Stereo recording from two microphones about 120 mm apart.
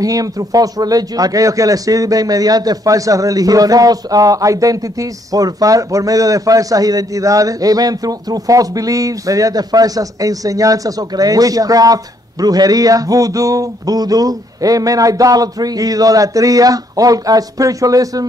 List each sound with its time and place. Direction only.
0.0 s a man's voice: 30° right (ahead or behind)